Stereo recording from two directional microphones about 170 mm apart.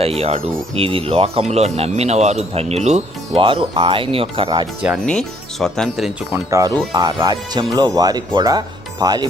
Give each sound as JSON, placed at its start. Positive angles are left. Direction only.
{"t": 0.0, "sound": "speech", "side_deg": -35}
{"t": 5.0, "sound": "speech", "side_deg": 5}
{"t": 6.3, "sound": "speech", "side_deg": -20}